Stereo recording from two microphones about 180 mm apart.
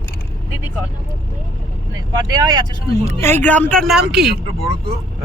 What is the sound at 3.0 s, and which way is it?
Speech, 10° left (ahead or behind).